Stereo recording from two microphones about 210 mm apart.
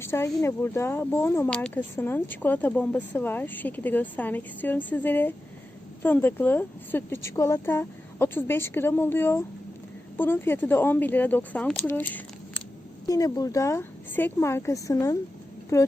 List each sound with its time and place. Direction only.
0.0 s speech: 10° left (ahead or behind)